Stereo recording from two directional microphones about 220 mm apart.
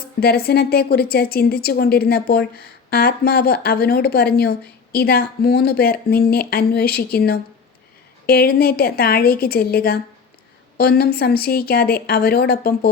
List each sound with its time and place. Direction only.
0.2 s a woman's voice: 45° left (ahead or behind)